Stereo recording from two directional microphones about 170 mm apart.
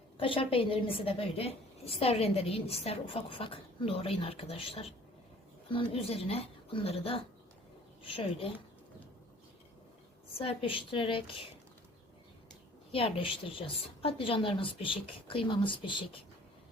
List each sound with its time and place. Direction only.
0.2 s a woman's voice: 35° left (ahead or behind)
10.3 s a woman's voice: 35° left (ahead or behind)
12.9 s a woman's voice: 35° left (ahead or behind)